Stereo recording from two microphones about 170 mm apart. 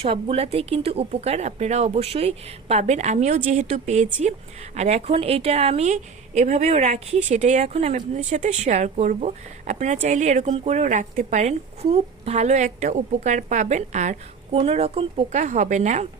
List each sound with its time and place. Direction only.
0.0 s speech: 35° right (ahead or behind)